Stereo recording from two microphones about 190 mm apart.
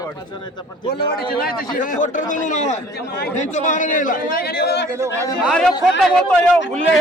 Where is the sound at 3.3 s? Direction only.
40° left (ahead or behind); by 4.8 s 60° left (ahead or behind).